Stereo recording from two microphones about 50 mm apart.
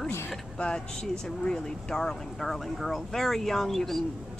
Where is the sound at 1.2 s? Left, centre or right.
Centre.